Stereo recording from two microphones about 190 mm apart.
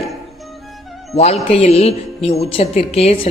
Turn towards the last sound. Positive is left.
turn(degrees=30)  # may be behind; listen again after turning